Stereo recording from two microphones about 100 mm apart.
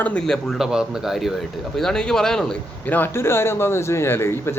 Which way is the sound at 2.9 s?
20° left (ahead or behind).